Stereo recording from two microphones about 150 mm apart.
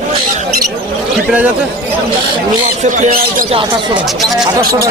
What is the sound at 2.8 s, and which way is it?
Speech, 65° right (ahead or behind).